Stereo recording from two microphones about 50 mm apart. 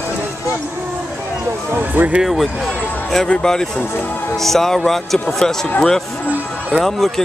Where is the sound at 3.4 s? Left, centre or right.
Centre.